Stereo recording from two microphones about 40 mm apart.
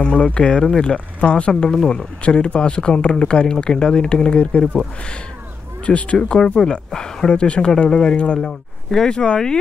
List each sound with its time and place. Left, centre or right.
0.0 s speech: left
1.5 s speech: centre
5.9 s speech: left
6.1 s speech: centre